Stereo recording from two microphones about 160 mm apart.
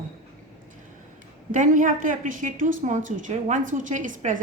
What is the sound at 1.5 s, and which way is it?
A woman's voice, 55° right (ahead or behind).